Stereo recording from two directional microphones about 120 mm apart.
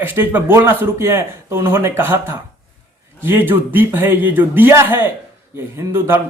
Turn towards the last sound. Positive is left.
turn(degrees=-20)  # may be behind; listen again after turning